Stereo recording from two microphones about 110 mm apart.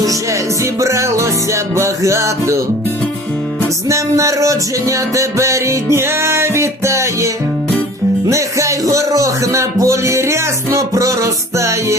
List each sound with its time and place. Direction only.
0.6 s music: 25° right (ahead or behind)
3.8 s music: 25° right (ahead or behind)
8.3 s music: 30° right (ahead or behind)